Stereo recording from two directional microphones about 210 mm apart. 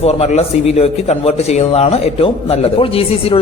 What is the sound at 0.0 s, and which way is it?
A man's voice, 30° left (ahead or behind).